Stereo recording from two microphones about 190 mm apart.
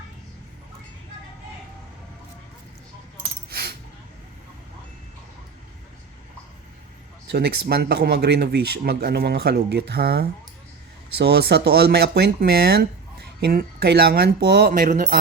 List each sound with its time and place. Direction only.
3.5 s coin: 55° right (ahead or behind)
7.3 s speech: 60° right (ahead or behind)